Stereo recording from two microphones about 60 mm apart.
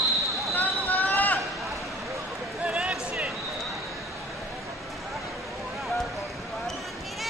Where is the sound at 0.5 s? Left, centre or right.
Left.